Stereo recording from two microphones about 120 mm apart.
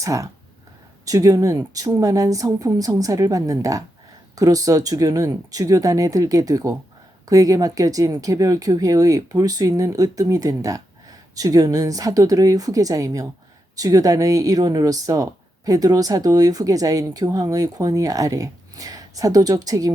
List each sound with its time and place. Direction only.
0.0 s speech: 25° right (ahead or behind)